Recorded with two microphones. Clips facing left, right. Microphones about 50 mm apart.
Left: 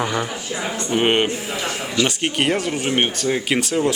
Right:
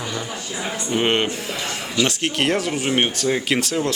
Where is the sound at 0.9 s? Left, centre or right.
Centre.